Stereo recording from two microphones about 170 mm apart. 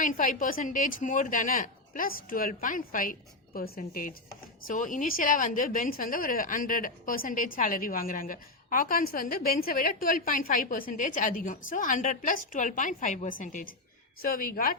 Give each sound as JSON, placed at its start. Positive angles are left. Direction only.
{"t": 0.0, "sound": "a woman's voice", "side_deg": 50}